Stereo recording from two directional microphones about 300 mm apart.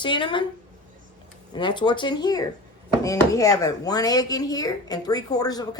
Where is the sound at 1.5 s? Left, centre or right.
Centre.